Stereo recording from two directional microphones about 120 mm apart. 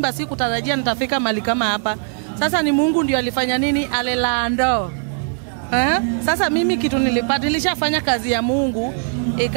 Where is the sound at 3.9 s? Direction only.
15° right (ahead or behind).